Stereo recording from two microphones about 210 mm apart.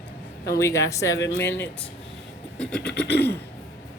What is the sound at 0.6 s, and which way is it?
Speech, 15° left (ahead or behind).